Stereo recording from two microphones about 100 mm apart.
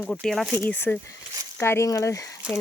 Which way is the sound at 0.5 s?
20° left (ahead or behind).